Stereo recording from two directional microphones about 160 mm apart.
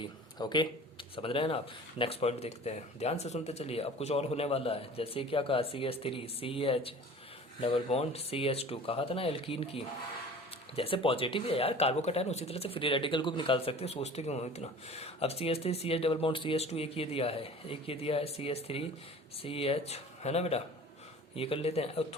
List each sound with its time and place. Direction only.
0.3 s speech: 30° left (ahead or behind)